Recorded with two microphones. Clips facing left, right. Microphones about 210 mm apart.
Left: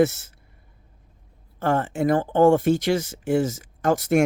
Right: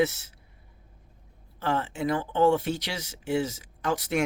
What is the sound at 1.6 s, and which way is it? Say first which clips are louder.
Speech: left 6 dB; 50° left (ahead or behind).